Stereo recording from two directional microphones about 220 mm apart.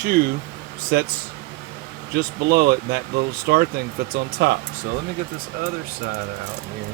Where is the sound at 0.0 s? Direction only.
45° right (ahead or behind).